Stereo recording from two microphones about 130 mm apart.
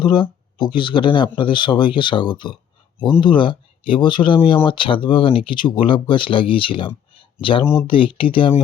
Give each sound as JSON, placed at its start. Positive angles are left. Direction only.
{"t": 0.0, "sound": "speech", "side_deg": 35}